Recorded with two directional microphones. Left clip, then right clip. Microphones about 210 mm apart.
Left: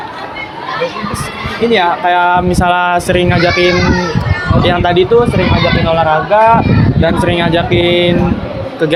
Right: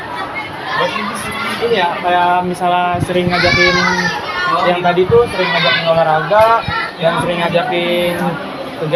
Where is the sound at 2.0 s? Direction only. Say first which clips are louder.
Left 3 dB; 55° left (ahead or behind).